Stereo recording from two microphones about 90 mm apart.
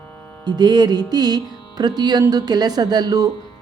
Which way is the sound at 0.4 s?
55° right (ahead or behind).